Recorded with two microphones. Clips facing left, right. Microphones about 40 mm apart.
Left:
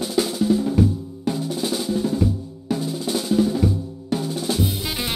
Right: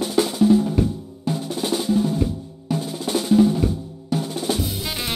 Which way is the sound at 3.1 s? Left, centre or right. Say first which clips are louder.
Right 4 dB; right.